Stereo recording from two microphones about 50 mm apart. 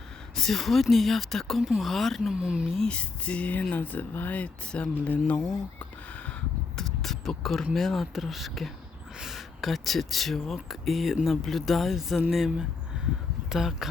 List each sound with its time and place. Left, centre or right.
0.3 s speech: centre
2.3 s speech: centre
2.8 s speech: left
6.7 s speech: centre